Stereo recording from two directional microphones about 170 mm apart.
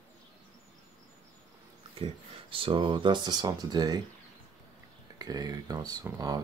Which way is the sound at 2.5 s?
30° right (ahead or behind).